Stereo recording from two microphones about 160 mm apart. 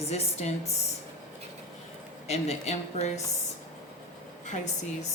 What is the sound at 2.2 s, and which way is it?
Speech, 45° left (ahead or behind).